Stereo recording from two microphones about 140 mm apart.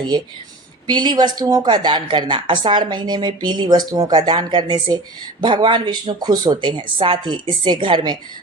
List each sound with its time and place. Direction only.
0.9 s speech: 30° right (ahead or behind)